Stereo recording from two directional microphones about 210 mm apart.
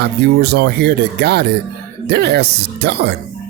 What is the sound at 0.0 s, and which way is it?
Speech, 50° right (ahead or behind).